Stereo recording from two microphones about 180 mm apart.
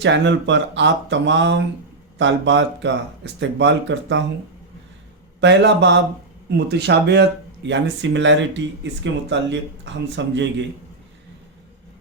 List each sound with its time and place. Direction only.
0.0 s speech: 85° right
5.4 s a man's voice: 75° right (ahead or behind)